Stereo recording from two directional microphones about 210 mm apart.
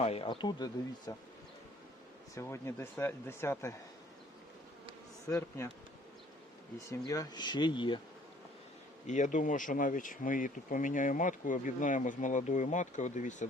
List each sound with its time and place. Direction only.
0.0 s speech: 25° left (ahead or behind)
2.3 s speech: 15° left (ahead or behind)
5.3 s speech: 15° left (ahead or behind)
6.7 s speech: 15° left (ahead or behind)
9.0 s speech: 35° left (ahead or behind)